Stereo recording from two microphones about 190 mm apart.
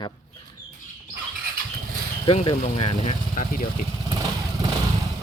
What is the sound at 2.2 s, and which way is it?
Speech, 30° left (ahead or behind).